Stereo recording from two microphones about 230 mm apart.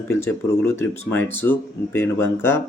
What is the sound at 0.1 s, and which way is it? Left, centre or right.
Speech, centre.